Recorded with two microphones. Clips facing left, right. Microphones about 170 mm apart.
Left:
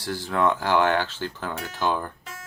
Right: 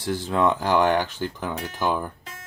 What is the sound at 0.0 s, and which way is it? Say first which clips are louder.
Speech: right 2 dB; 20° right (ahead or behind).